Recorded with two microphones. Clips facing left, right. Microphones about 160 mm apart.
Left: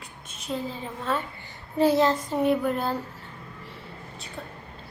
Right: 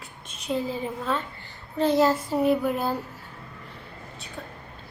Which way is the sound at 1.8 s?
10° left (ahead or behind).